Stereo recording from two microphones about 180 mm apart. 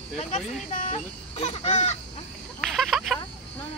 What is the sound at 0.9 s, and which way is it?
Speech, 35° left (ahead or behind).